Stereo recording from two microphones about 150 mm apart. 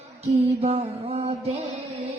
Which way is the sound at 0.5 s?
45° right (ahead or behind).